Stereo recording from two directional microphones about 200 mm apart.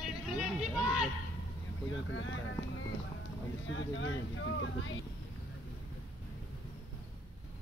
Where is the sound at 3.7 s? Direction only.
75° left (ahead or behind).